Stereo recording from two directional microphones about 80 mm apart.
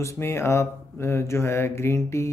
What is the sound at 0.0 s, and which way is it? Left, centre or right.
Mantra, left.